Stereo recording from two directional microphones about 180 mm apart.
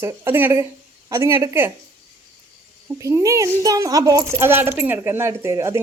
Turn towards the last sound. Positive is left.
turn(degrees=-15)  # may be behind; listen again after turning